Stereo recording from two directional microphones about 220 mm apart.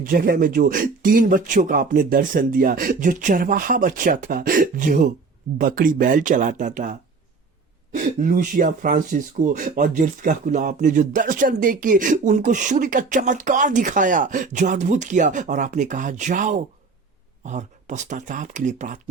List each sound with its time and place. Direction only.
0.0 s speech: 40° right (ahead or behind)
7.9 s speech: 35° right (ahead or behind)